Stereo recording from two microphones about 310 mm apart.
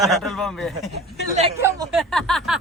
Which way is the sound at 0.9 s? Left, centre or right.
Right.